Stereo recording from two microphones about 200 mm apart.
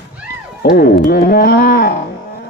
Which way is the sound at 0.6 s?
50° left (ahead or behind).